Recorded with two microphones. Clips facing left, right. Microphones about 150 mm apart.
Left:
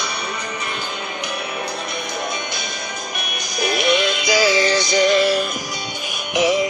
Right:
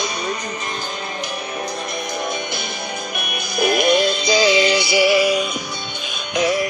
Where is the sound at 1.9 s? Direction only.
50° right (ahead or behind); by 5.5 s 5° right (ahead or behind).